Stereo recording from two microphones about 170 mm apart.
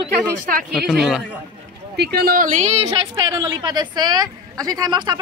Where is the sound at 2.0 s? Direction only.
65° right (ahead or behind); by 2.8 s 40° right (ahead or behind).